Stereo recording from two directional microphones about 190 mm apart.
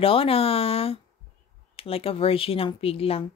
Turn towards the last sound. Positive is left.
turn(degrees=30)  # may be behind; listen again after turning